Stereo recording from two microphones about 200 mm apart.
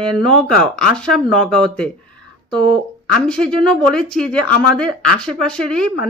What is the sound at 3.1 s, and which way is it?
A woman's voice, 5° left (ahead or behind).